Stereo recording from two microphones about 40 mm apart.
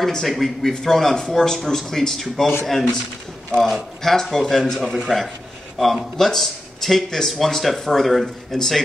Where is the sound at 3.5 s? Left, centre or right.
Centre.